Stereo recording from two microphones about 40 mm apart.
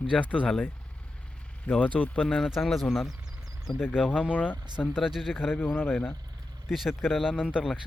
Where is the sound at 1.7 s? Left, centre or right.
Left.